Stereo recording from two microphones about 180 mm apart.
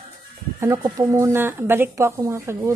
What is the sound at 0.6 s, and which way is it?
Speech, 20° right (ahead or behind).